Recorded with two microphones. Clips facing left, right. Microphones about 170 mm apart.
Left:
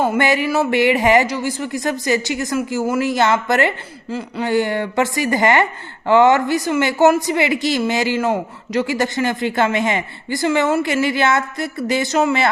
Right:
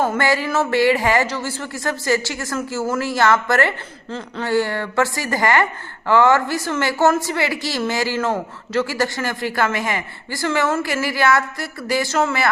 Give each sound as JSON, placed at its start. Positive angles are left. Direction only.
{"t": 0.0, "sound": "speech", "side_deg": 15}